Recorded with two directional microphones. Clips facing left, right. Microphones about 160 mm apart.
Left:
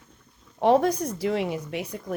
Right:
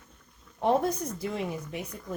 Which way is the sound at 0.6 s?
85° left.